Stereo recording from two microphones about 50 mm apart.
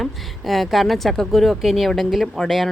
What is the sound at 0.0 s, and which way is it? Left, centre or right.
Speech, centre.